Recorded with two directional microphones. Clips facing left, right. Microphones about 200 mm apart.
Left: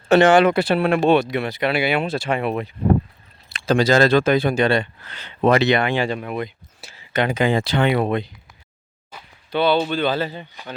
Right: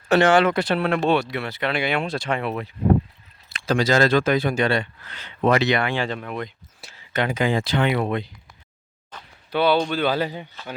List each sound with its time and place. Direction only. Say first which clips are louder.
0.1 s speech: left 3 dB; 20° left (ahead or behind)
3.5 s speech: left 3 dB; 30° left (ahead or behind); by 7.2 s 5° left (ahead or behind)
7.2 s speech: left 3 dB; 25° left (ahead or behind)
9.1 s a sound: even; 10° left (ahead or behind)
9.5 s speech: left 1 dB; 10° right (ahead or behind)